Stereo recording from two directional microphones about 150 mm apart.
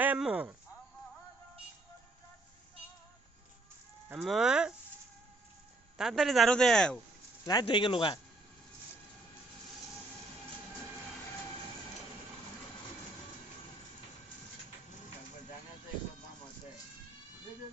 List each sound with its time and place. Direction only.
0.0 s speech: 10° right (ahead or behind)
4.1 s speech: 5° right (ahead or behind)
6.0 s speech: centre (ahead or behind)
7.4 s a man's voice: 30° left (ahead or behind)